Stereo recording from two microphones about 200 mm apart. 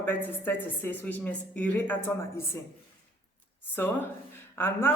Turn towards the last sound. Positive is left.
turn(degrees=10)  # may be behind; listen again after turning